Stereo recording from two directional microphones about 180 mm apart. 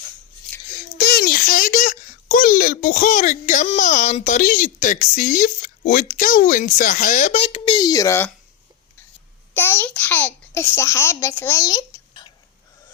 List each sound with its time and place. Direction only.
0.9 s a child's voice: 60° left (ahead or behind); by 8.3 s 15° left (ahead or behind)
9.6 s a child's voice: 10° left (ahead or behind)